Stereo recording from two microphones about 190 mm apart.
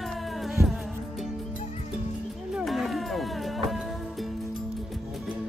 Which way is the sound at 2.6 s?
Centre (ahead or behind).